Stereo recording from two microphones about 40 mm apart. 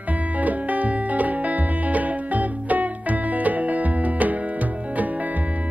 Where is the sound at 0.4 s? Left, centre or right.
Right.